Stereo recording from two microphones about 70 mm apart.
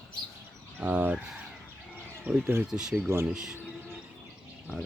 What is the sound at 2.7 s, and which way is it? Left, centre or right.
Speech, centre.